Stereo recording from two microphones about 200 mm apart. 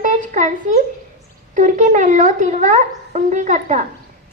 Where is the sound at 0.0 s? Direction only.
40° right (ahead or behind).